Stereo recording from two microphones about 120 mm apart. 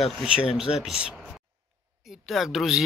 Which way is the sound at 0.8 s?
5° right (ahead or behind).